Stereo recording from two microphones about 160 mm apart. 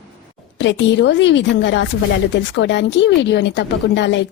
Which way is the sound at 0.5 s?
90° left.